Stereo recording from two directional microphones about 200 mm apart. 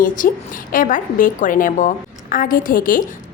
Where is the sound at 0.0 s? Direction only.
40° left (ahead or behind).